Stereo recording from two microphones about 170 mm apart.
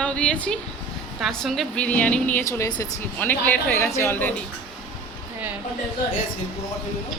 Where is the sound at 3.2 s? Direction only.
10° left (ahead or behind).